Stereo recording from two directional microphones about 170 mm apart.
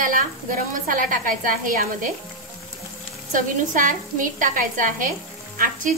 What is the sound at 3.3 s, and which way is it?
A woman's voice, 50° right (ahead or behind).